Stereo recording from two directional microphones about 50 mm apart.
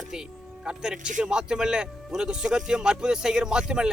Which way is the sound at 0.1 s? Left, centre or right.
Centre.